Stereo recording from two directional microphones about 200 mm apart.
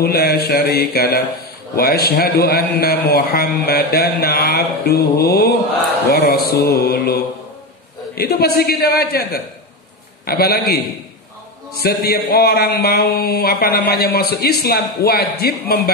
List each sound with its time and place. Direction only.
0.0 s a man's voice: 50° left (ahead or behind)
11.8 s a man's voice: 50° left (ahead or behind)